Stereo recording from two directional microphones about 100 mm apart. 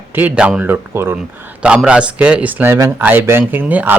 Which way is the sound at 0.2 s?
15° right (ahead or behind).